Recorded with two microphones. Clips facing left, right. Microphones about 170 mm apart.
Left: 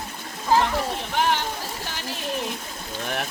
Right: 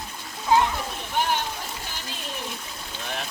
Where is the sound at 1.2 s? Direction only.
70° left (ahead or behind).